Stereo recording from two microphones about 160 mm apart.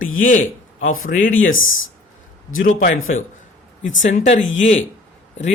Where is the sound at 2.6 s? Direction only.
60° left (ahead or behind).